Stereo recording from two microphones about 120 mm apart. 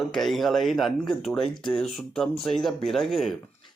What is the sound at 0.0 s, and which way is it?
Speech, centre (ahead or behind).